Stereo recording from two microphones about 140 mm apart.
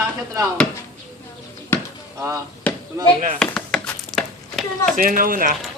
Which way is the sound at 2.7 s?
10° left (ahead or behind).